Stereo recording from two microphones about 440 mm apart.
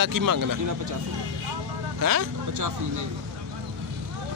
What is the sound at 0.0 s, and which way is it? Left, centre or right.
Speech, right.